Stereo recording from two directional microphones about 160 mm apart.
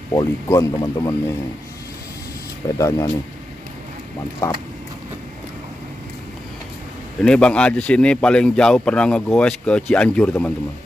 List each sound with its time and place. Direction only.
0.1 s speech: 25° left (ahead or behind)
2.8 s speech: 20° left (ahead or behind)
4.4 s speech: 15° left (ahead or behind)
7.2 s speech: 5° left (ahead or behind)